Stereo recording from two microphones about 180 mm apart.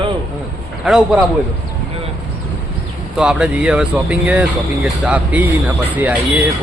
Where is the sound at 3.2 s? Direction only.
5° right (ahead or behind).